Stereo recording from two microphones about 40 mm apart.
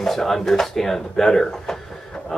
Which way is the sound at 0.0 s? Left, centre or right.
Centre.